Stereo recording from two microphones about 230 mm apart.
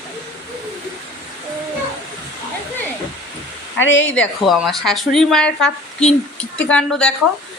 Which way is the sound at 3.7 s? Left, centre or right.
Left.